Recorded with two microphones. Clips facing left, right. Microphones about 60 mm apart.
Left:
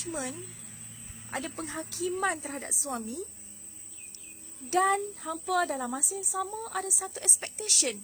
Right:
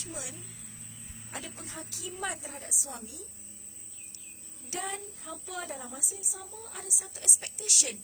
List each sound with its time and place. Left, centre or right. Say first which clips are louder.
0.1 s a woman's voice: left 8 dB; left
1.3 s a woman's voice: left 8 dB; left
4.7 s speech: left 13 dB; left
4.9 s speech: left 9 dB; left